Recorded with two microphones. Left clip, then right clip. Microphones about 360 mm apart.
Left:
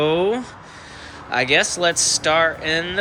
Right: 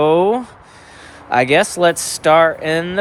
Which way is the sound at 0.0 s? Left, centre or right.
Centre.